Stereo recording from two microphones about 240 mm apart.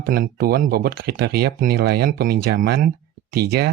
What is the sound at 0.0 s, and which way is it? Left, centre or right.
Speech, right.